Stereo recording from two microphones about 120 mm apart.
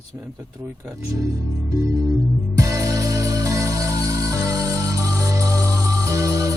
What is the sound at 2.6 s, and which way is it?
Music, 25° right (ahead or behind).